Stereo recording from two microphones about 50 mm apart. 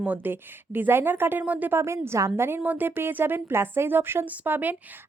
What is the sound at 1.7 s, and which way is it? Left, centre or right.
Speech, right.